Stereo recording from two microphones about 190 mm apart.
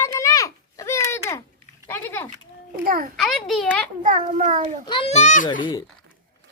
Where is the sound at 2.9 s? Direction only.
50° right (ahead or behind).